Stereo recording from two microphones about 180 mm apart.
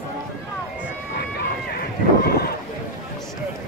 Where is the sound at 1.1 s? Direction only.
65° left (ahead or behind).